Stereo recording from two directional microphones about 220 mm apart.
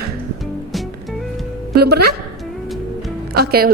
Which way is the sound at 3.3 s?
45° right (ahead or behind).